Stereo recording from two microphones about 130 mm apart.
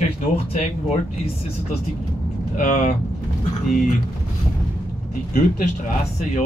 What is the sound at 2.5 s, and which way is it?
Speech, 90° left.